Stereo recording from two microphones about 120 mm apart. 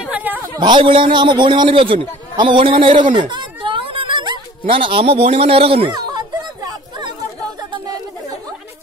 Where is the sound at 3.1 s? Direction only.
40° right (ahead or behind).